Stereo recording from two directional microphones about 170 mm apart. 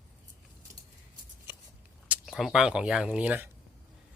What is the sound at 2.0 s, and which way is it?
Speech, centre (ahead or behind).